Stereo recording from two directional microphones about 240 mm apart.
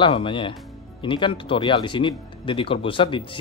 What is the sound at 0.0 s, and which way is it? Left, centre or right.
Speech, left.